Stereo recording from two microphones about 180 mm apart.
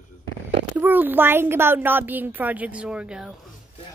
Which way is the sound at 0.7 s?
10° right (ahead or behind).